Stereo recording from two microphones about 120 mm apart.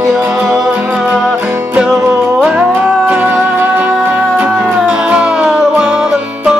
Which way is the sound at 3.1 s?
15° right (ahead or behind).